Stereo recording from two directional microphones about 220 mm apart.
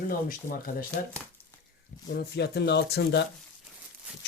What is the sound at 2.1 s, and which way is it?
Speech, 50° left (ahead or behind).